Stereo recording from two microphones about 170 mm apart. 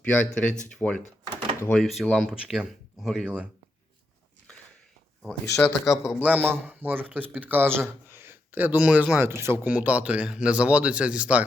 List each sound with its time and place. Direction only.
0.0 s speech: 10° left (ahead or behind)
5.5 s speech: 15° left (ahead or behind)
6.1 s a man's voice: 10° right (ahead or behind)